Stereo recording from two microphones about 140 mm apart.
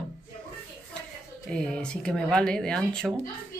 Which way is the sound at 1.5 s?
5° left (ahead or behind).